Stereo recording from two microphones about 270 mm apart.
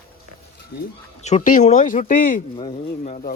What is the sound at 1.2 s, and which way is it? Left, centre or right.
Speech, left.